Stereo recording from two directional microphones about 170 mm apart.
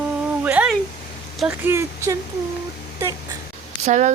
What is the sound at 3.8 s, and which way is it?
Speech, 45° right (ahead or behind).